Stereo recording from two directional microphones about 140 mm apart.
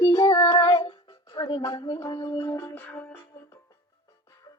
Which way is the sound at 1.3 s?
35° left (ahead or behind).